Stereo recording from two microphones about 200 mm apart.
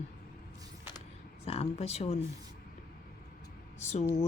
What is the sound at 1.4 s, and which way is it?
Speech, 30° left (ahead or behind).